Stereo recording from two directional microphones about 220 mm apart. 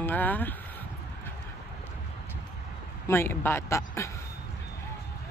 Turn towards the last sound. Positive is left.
turn(degrees=10)  # may be behind; listen again after turning